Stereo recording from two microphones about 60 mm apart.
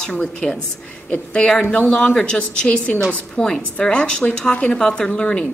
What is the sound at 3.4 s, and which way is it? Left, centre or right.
A woman's voice, centre.